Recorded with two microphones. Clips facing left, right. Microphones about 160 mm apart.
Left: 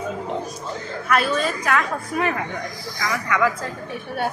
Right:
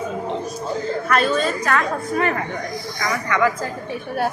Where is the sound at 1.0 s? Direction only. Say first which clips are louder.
Even; 5° left (ahead or behind).